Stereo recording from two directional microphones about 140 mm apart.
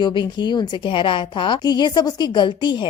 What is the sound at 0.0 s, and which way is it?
A woman's voice, 35° left (ahead or behind).